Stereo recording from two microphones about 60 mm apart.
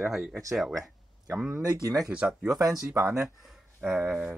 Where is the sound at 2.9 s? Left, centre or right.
Right.